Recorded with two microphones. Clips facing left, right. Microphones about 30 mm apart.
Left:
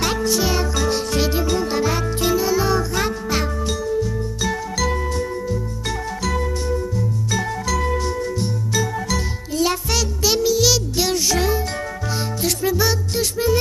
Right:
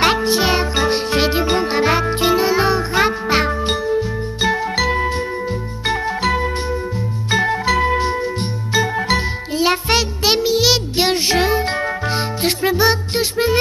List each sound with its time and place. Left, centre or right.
0.0 s music: right